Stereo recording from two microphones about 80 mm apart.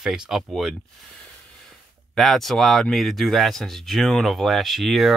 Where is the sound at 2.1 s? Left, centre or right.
Centre.